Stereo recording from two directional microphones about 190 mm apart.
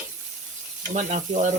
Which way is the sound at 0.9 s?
40° right (ahead or behind).